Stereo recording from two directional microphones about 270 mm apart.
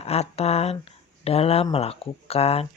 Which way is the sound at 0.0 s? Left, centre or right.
Left.